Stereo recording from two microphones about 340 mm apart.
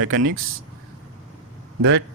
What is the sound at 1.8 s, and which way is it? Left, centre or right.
Speech, right.